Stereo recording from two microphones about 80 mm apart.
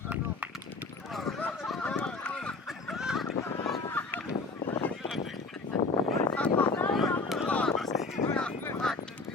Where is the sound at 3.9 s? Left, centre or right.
Left.